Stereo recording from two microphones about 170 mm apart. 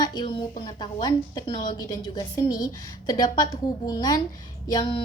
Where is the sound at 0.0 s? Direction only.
25° left (ahead or behind).